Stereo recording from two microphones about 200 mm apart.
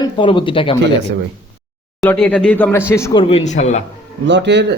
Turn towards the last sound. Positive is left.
turn(degrees=-60)  # may be behind; listen again after turning